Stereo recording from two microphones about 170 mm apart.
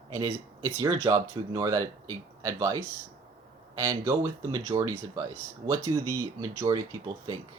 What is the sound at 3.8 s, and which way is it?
Speech, 20° right (ahead or behind).